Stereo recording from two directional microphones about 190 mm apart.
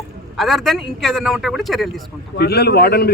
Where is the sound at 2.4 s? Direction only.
55° left (ahead or behind).